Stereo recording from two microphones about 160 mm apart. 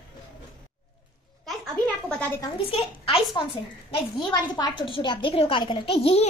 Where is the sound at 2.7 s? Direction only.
35° left (ahead or behind).